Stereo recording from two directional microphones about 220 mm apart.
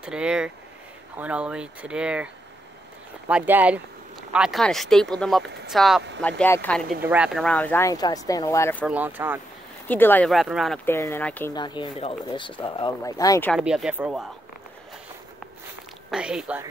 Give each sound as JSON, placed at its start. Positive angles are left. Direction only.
{"t": 0.0, "sound": "speech", "side_deg": -5}
{"t": 5.4, "sound": "speech", "side_deg": -50}
{"t": 5.7, "sound": "speech", "side_deg": 0}
{"t": 7.0, "sound": "speech", "side_deg": -5}
{"t": 8.8, "sound": "speech", "side_deg": -5}
{"t": 9.8, "sound": "speech", "side_deg": 10}
{"t": 10.9, "sound": "speech", "side_deg": 10}
{"t": 11.5, "sound": "speech", "side_deg": 20}
{"t": 13.5, "sound": "speech", "side_deg": 0}
{"t": 16.1, "sound": "speech", "side_deg": -5}